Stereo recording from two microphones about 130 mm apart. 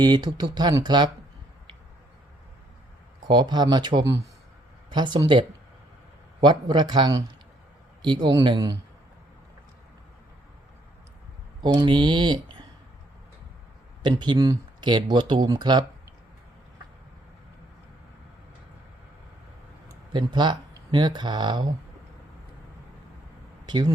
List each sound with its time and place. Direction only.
0.0 s speech: 30° right (ahead or behind)
3.2 s speech: 35° right (ahead or behind)
11.8 s speech: 35° right (ahead or behind)
14.0 s speech: 35° right (ahead or behind)
20.1 s speech: 35° right (ahead or behind)
23.6 s speech: 30° right (ahead or behind)